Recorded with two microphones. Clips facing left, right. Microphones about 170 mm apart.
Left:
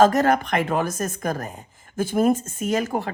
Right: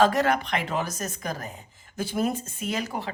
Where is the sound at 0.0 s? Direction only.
45° left (ahead or behind).